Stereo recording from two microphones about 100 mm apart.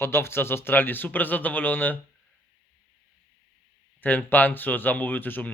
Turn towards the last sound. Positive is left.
turn(degrees=20)  # may be behind; listen again after turning